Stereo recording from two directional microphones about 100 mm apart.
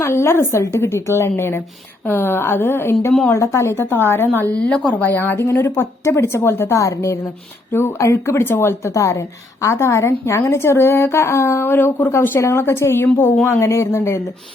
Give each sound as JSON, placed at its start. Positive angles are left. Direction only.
{"t": 0.0, "sound": "a woman's voice", "side_deg": 25}
{"t": 4.7, "sound": "speech", "side_deg": 10}
{"t": 5.0, "sound": "a woman's voice", "side_deg": 20}